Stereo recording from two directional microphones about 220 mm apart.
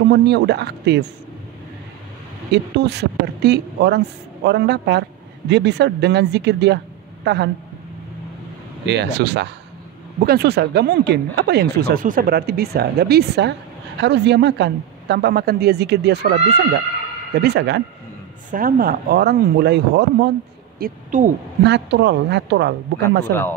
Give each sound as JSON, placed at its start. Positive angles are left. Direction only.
{"t": 0.1, "sound": "speech", "side_deg": -50}
{"t": 2.5, "sound": "speech", "side_deg": -50}
{"t": 8.8, "sound": "speech", "side_deg": -50}
{"t": 18.5, "sound": "speech", "side_deg": -40}
{"t": 20.8, "sound": "speech", "side_deg": -35}
{"t": 21.6, "sound": "speech", "side_deg": -50}